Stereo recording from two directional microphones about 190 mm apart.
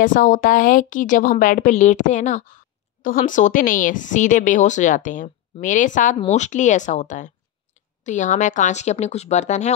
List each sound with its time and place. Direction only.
0.0 s speech: 45° left (ahead or behind)